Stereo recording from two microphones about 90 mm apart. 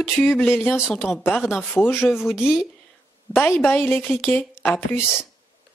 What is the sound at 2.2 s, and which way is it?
Speech, centre (ahead or behind).